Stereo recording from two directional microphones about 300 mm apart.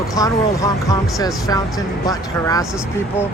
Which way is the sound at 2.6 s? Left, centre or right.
Centre.